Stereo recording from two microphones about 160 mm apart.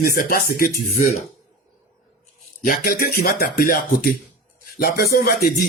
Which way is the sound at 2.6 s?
65° left (ahead or behind).